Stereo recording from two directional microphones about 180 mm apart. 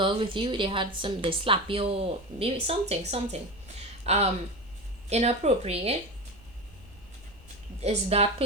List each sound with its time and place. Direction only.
0.0 s a woman's voice: 30° right (ahead or behind)
7.8 s a woman's voice: 35° right (ahead or behind)